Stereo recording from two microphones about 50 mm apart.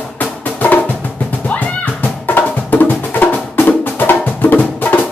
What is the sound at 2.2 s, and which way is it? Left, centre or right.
Music, left.